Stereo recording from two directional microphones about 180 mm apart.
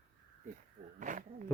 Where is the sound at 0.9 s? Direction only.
45° right (ahead or behind).